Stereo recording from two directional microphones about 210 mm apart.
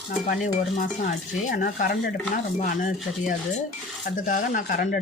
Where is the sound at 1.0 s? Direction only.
45° left (ahead or behind).